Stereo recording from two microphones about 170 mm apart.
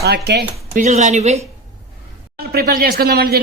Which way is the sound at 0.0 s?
75° right (ahead or behind).